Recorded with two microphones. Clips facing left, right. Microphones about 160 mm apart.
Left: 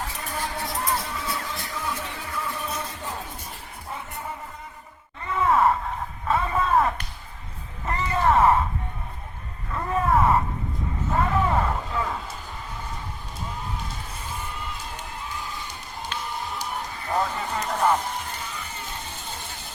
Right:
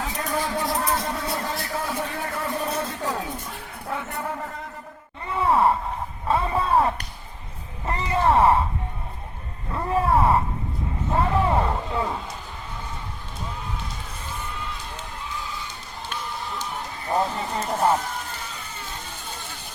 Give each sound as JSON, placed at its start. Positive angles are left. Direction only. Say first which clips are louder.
{"t": 0.0, "sound": "music", "louder": "right 5 dB", "side_deg": -90}
{"t": 1.9, "sound": "music", "louder": "right 4 dB", "side_deg": -60}
{"t": 5.3, "sound": "sigh", "louder": "right 1 dB", "side_deg": -30}
{"t": 6.2, "sound": "a sound", "louder": "right 1 dB", "side_deg": -30}
{"t": 9.7, "sound": "a sound", "louder": "right 1 dB", "side_deg": -30}
{"t": 17.7, "sound": "music", "louder": "right 1 dB", "side_deg": -30}